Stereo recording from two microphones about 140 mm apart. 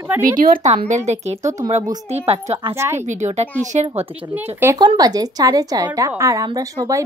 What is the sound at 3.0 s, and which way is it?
Speech, 55° right (ahead or behind).